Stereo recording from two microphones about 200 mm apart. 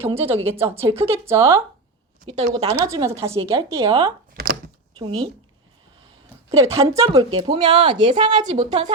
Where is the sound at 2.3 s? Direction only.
30° right (ahead or behind).